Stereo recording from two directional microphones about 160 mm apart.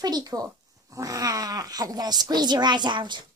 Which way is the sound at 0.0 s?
25° right (ahead or behind).